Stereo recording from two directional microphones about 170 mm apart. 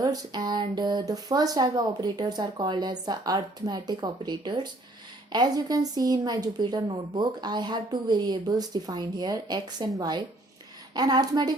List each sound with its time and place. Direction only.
0.0 s a woman's voice: 25° right (ahead or behind)